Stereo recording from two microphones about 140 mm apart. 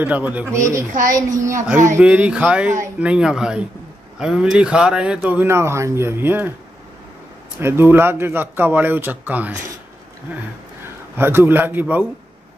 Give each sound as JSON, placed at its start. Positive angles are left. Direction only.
{"t": 0.0, "sound": "a woman's voice", "side_deg": -10}
{"t": 2.0, "sound": "speech", "side_deg": -10}
{"t": 7.6, "sound": "speech", "side_deg": -15}
{"t": 11.1, "sound": "speech", "side_deg": -15}